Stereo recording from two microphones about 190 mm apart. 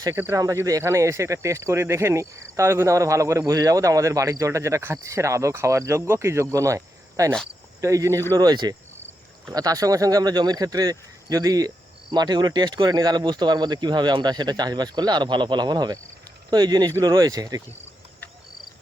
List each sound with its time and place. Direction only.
0.0 s speech: 15° right (ahead or behind)